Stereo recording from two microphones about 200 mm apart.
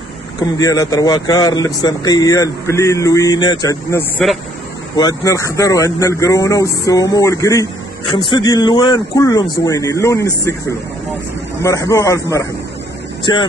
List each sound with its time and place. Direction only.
0.4 s a man's voice: 20° left (ahead or behind)
4.2 s speech: centre (ahead or behind)
4.9 s a man's voice: 20° left (ahead or behind)
11.6 s a man's voice: 15° left (ahead or behind)